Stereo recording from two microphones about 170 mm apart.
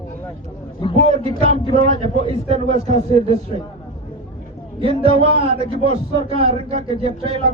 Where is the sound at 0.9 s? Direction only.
35° right (ahead or behind).